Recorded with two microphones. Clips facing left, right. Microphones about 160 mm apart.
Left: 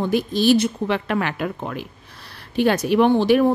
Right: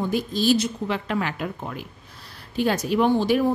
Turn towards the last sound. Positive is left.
turn(degrees=65)  # may be behind; listen again after turning